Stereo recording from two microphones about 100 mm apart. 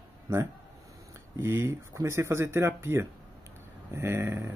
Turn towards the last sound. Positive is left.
turn(degrees=-25)  # may be behind; listen again after turning